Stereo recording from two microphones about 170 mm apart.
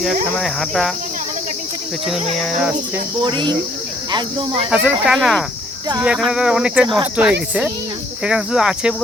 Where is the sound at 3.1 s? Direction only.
25° right (ahead or behind).